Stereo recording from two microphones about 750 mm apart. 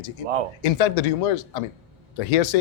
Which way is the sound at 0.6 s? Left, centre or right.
Left.